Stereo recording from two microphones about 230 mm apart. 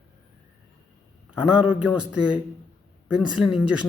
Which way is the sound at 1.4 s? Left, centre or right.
Centre.